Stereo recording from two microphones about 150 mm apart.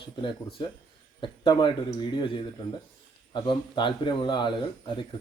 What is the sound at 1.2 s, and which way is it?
Speech, 30° left (ahead or behind).